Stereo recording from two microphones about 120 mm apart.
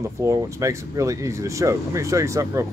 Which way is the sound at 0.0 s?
25° right (ahead or behind).